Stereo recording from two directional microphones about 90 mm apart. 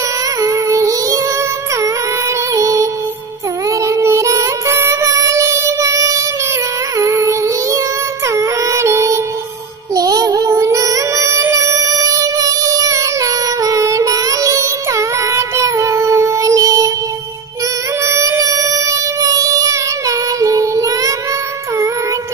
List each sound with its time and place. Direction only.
0.4 s music: 35° right (ahead or behind)
2.5 s music: 35° right (ahead or behind)
9.9 s child singing: 45° right (ahead or behind)
11.5 s music: 40° right (ahead or behind)
18.0 s music: 35° right (ahead or behind)